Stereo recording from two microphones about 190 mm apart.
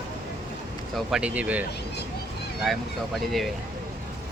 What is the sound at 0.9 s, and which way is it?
Speech, 5° right (ahead or behind).